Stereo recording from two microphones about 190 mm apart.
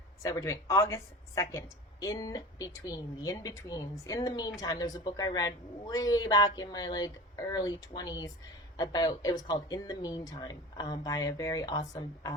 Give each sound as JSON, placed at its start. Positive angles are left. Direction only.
{"t": 0.2, "sound": "a woman's voice", "side_deg": 15}